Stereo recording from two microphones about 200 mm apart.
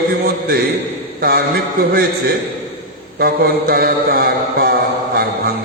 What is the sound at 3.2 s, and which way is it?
A man's voice, 50° right (ahead or behind).